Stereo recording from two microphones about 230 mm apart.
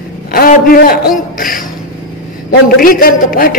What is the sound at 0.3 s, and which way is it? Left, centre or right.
Speech, left.